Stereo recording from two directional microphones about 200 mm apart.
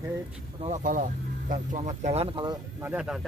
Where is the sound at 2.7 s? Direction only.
5° right (ahead or behind).